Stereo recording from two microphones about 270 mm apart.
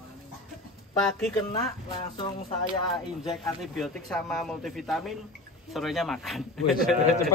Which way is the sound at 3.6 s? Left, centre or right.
Centre.